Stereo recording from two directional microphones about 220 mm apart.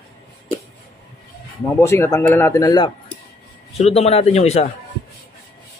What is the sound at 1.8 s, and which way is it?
A man's voice, 10° left (ahead or behind).